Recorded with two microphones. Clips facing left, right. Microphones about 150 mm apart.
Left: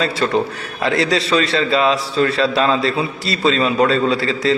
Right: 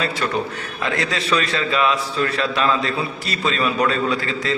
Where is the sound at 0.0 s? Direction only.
30° left (ahead or behind).